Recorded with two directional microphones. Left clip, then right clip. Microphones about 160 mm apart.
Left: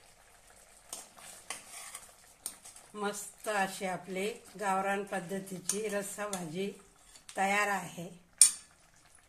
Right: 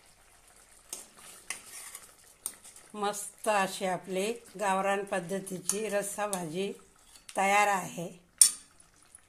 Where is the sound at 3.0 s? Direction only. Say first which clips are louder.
Right 4 dB; 35° right (ahead or behind).